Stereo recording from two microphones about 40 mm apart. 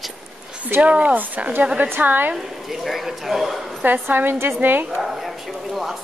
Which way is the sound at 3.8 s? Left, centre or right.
Right.